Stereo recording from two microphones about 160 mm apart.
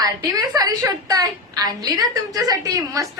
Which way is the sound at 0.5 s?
25° right (ahead or behind).